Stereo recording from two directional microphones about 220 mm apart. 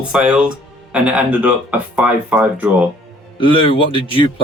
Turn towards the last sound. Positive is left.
turn(degrees=25)  # may be behind; listen again after turning